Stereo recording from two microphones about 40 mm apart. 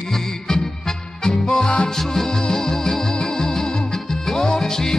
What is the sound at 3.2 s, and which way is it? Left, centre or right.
Music, left.